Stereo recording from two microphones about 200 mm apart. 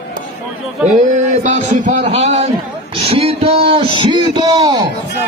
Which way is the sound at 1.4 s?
40° right (ahead or behind).